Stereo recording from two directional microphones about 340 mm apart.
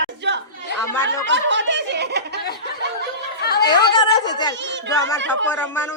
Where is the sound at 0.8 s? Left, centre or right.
Centre.